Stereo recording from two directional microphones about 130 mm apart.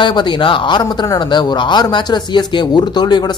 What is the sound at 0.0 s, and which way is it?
A man's voice, 35° left (ahead or behind).